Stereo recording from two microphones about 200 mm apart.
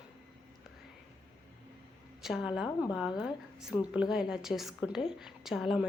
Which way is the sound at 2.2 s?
Centre (ahead or behind).